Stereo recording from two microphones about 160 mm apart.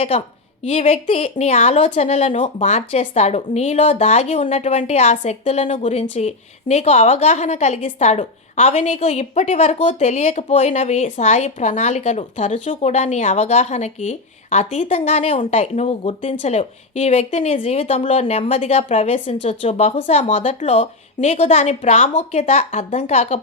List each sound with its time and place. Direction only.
0.6 s a woman's voice: 40° left (ahead or behind)